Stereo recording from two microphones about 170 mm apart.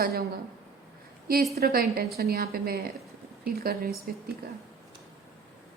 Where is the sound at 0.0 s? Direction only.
65° right (ahead or behind).